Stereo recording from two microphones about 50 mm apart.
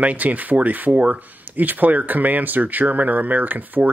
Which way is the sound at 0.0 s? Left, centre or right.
Right.